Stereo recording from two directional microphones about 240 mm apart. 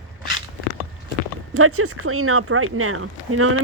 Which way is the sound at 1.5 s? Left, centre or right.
Right.